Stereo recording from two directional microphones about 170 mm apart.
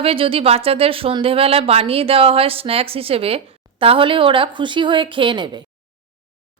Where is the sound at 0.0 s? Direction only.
35° right (ahead or behind).